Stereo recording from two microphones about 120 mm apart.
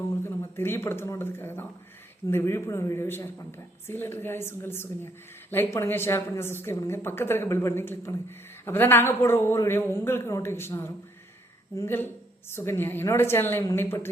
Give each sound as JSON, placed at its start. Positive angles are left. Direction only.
{"t": 0.3, "sound": "a woman's voice", "side_deg": 20}